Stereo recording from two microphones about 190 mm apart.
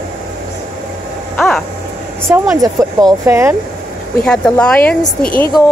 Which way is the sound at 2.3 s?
15° right (ahead or behind).